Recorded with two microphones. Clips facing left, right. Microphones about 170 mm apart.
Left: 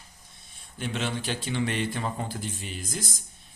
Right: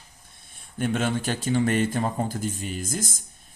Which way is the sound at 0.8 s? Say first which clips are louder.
Right 6 dB; 50° right (ahead or behind).